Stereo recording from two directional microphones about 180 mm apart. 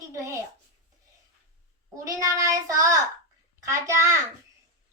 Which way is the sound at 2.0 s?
20° right (ahead or behind).